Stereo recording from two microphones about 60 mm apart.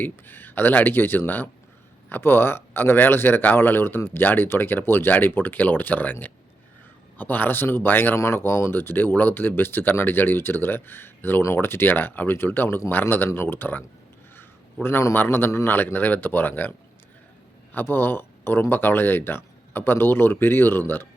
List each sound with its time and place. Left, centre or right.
0.0 s a man's voice: left
8.1 s a man's voice: left
14.3 s a sound: left
15.1 s a man's voice: left
17.7 s a man's voice: left